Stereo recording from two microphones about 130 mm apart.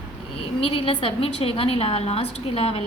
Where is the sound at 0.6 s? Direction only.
45° left (ahead or behind).